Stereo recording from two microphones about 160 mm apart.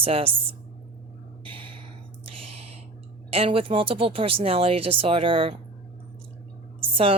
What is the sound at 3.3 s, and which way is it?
A man's voice, 35° right (ahead or behind).